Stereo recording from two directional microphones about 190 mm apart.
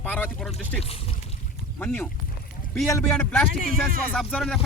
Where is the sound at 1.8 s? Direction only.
10° left (ahead or behind).